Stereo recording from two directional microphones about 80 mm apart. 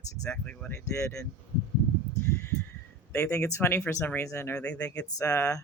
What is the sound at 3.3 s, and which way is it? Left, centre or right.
Speech, left.